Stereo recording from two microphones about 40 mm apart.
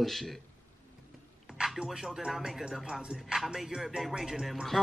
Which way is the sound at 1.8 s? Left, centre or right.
Centre.